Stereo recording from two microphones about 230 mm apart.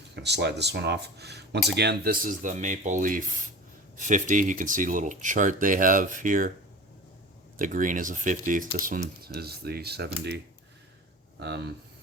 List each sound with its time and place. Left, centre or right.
0.2 s speech: right
7.6 s speech: right
11.3 s speech: right